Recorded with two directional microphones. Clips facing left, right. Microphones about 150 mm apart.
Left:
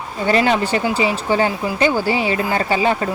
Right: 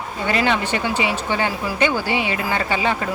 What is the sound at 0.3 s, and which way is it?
Speech, 35° left (ahead or behind).